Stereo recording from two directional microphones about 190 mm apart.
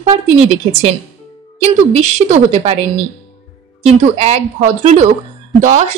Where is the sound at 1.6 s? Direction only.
35° right (ahead or behind).